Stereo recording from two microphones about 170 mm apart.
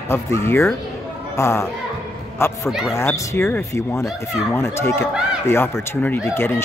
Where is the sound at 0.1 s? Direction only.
15° left (ahead or behind).